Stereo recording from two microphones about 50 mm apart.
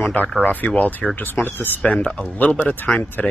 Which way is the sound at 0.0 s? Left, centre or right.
Left.